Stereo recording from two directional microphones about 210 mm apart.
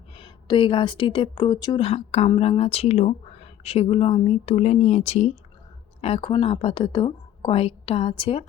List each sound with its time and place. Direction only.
0.2 s a woman's voice: 25° left (ahead or behind)